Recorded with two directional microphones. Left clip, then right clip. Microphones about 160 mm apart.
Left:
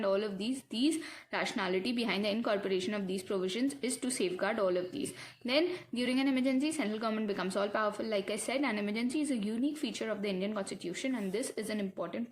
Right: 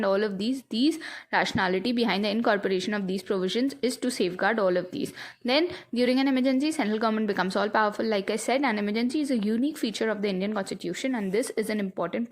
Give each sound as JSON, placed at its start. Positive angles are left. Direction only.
{"t": 0.0, "sound": "a woman's voice", "side_deg": -45}